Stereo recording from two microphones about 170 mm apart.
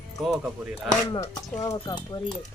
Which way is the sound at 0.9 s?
25° left (ahead or behind).